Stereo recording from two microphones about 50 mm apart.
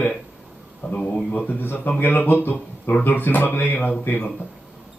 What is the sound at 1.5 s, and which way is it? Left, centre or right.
Speech, left.